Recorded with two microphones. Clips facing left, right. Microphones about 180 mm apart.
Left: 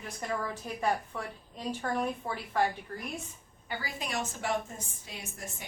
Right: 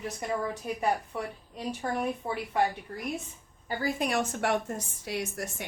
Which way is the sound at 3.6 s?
55° right (ahead or behind).